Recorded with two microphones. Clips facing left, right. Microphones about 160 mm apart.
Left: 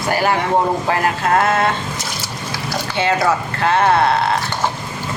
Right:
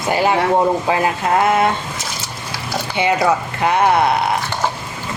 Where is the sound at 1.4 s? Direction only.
15° right (ahead or behind).